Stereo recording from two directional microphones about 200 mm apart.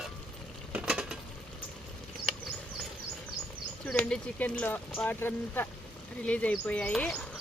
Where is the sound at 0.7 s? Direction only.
5° right (ahead or behind).